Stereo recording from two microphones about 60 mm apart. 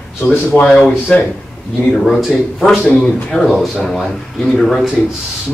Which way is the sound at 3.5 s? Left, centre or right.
Centre.